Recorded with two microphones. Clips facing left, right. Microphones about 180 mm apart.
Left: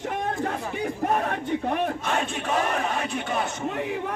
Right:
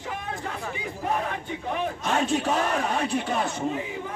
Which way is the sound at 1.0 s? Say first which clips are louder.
Left 2 dB; 50° left (ahead or behind).